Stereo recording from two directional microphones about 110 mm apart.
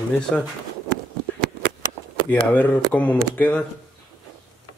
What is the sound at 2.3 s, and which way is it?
Speech, 15° left (ahead or behind).